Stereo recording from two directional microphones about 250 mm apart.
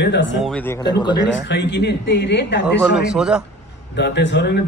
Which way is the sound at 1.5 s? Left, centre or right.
Left.